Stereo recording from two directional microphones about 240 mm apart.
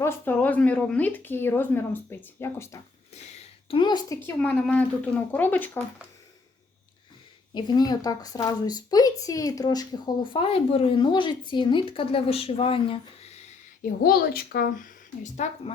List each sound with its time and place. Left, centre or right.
0.0 s speech: centre
3.7 s speech: centre
7.5 s a woman's voice: centre
13.8 s a woman's voice: left